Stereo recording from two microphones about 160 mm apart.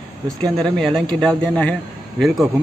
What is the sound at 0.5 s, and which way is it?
A man's voice, 5° left (ahead or behind).